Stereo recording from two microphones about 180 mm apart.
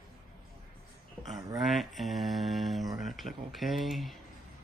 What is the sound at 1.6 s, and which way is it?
Speech, centre (ahead or behind).